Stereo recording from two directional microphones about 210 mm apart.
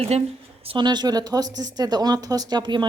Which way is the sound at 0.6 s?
25° right (ahead or behind).